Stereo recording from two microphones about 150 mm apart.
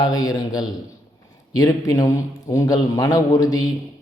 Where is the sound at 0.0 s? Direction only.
25° left (ahead or behind).